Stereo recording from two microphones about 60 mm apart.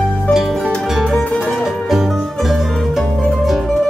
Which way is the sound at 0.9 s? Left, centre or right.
Centre.